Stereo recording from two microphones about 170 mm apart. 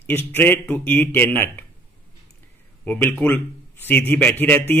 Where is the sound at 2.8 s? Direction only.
10° left (ahead or behind).